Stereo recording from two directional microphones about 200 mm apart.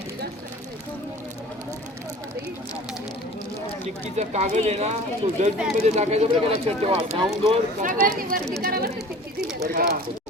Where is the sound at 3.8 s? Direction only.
35° right (ahead or behind).